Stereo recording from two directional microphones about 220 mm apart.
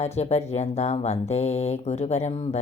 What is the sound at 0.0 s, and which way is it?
Speech, 30° left (ahead or behind).